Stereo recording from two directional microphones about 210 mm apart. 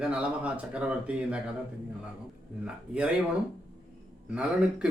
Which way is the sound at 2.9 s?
5° right (ahead or behind).